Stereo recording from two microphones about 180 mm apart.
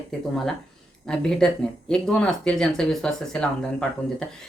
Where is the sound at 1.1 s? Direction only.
5° left (ahead or behind).